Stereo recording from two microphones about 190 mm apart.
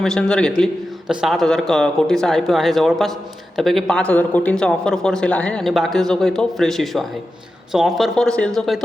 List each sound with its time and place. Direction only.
0.0 s a man's voice: 5° left (ahead or behind)